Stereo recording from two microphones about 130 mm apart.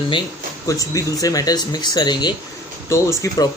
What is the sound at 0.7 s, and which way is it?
Speech, 25° left (ahead or behind).